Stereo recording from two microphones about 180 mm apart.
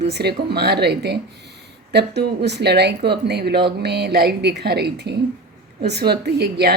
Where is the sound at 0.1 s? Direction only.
65° right (ahead or behind).